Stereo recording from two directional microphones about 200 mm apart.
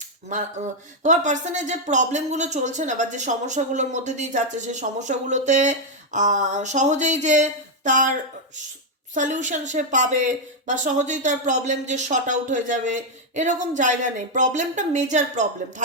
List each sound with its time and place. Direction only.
0.3 s speech: 40° right (ahead or behind)
9.1 s speech: 40° right (ahead or behind)